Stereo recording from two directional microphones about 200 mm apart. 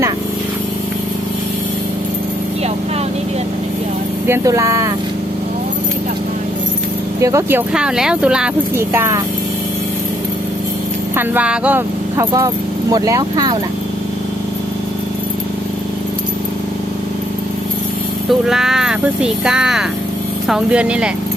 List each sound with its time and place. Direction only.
4.3 s speech: 15° right (ahead or behind)
7.2 s speech: 15° right (ahead or behind)
7.7 s speech: 5° right (ahead or behind)
11.2 s speech: 5° right (ahead or behind)
18.3 s speech: centre (ahead or behind)